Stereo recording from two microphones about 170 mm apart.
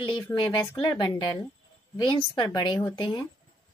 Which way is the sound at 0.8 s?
25° left (ahead or behind).